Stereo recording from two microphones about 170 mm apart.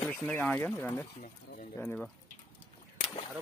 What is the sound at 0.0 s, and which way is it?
Speech, 10° left (ahead or behind).